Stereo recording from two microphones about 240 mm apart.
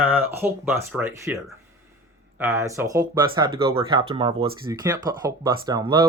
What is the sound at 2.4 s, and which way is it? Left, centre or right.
Speech, centre.